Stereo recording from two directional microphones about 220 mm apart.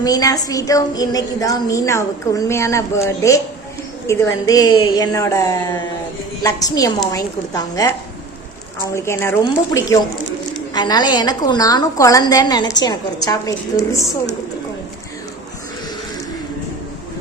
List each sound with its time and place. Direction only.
0.0 s a woman's voice: 15° left (ahead or behind)